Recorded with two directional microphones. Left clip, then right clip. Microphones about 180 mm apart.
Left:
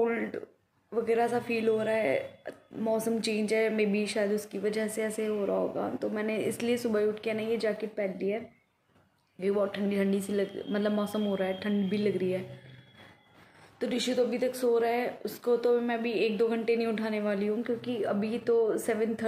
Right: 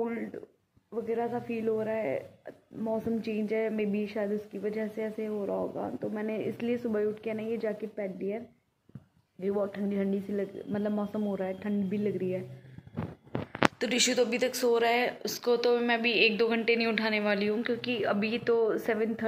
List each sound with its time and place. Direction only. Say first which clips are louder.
0.0 s a sound: left 5 dB; 15° left (ahead or behind)
0.9 s speech: left 5 dB; 15° left (ahead or behind)
9.4 s speech: left 2 dB; 15° left (ahead or behind)
13.7 s speech: right 2 dB; 5° left (ahead or behind)